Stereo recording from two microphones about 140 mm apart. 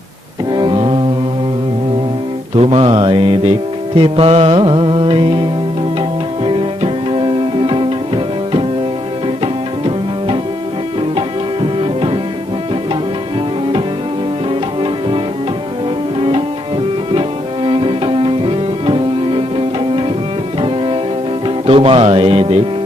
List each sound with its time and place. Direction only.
0.5 s music: 35° right (ahead or behind)
2.6 s music: 40° right (ahead or behind)
6.4 s music: 35° right (ahead or behind)
11.8 s music: 40° right (ahead or behind)
17.1 s music: 40° right (ahead or behind)